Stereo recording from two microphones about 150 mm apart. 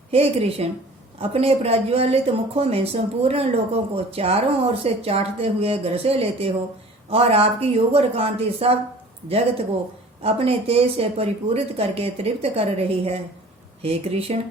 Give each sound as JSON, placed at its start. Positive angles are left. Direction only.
{"t": 0.1, "sound": "a woman's voice", "side_deg": -40}
{"t": 10.2, "sound": "speech", "side_deg": -40}
{"t": 13.8, "sound": "speech", "side_deg": -40}